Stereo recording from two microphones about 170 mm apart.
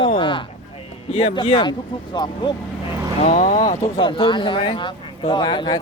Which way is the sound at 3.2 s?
45° left (ahead or behind).